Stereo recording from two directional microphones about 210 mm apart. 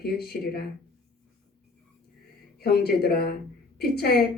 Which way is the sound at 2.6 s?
50° left (ahead or behind).